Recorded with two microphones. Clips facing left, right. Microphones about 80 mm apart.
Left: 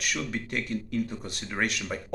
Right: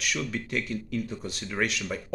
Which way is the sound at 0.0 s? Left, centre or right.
Left.